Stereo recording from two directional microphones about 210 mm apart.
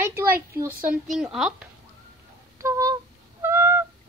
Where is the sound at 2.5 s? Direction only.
15° right (ahead or behind).